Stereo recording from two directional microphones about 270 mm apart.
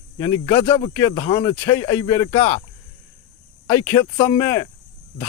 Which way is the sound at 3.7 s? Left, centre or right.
Centre.